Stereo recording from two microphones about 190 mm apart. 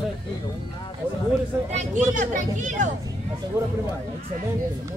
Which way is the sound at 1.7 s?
40° right (ahead or behind).